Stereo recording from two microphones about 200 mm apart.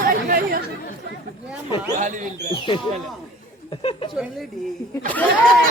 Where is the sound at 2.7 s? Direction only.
25° left (ahead or behind).